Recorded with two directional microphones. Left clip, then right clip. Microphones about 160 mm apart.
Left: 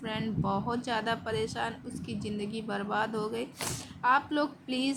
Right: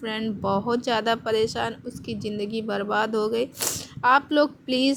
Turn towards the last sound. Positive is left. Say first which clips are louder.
# right 10 dB
turn(degrees=-35)  # may be behind; listen again after turning